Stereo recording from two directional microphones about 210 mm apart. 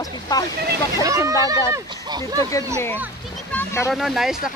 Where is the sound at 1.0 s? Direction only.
15° right (ahead or behind).